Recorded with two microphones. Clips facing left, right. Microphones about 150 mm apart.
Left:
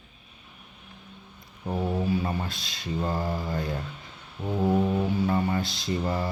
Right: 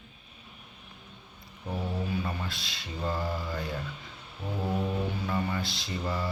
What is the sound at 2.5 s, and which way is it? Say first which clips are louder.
Speech: left 7 dB; 45° left (ahead or behind).